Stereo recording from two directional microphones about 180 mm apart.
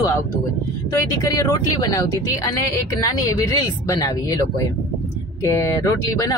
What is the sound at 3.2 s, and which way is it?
Speech, 20° left (ahead or behind).